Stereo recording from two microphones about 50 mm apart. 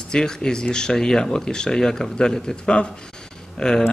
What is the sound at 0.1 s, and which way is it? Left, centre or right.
Speech, centre.